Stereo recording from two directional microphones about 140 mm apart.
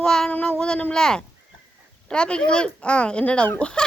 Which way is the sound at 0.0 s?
5° left (ahead or behind).